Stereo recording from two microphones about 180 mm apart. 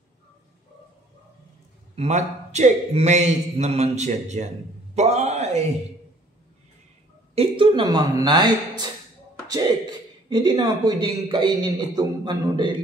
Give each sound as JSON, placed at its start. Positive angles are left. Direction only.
{"t": 2.0, "sound": "a man's voice", "side_deg": -40}
{"t": 7.3, "sound": "a man's voice", "side_deg": -30}